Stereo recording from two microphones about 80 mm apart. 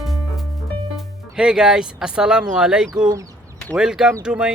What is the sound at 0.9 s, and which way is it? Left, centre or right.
Speech, centre.